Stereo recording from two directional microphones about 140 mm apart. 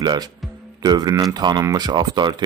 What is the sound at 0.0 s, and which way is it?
A man's voice, 30° right (ahead or behind).